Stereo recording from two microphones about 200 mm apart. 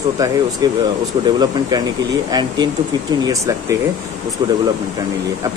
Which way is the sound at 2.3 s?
20° right (ahead or behind).